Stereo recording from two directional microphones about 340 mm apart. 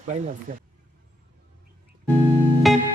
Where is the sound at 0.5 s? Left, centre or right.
Right.